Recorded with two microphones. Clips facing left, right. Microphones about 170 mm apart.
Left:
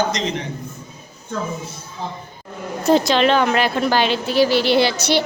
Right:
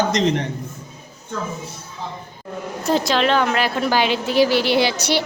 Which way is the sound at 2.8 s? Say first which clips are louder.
Left 4 dB; centre (ahead or behind).